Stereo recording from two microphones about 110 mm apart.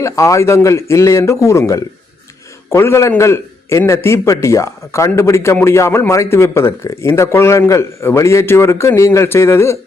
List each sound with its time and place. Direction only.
0.0 s a man's voice: 30° left (ahead or behind)